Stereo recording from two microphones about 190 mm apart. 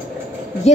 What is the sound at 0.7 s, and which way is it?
Speech, 35° left (ahead or behind).